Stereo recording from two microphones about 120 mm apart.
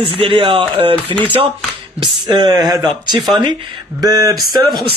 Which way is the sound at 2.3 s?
40° right (ahead or behind).